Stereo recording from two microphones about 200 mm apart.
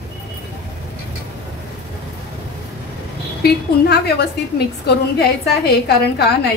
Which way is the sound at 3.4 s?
55° left (ahead or behind).